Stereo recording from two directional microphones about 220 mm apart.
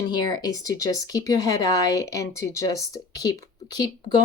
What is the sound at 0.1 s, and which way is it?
Speech, 20° left (ahead or behind).